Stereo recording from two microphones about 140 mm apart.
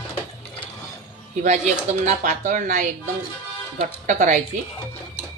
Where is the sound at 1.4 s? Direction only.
55° right (ahead or behind).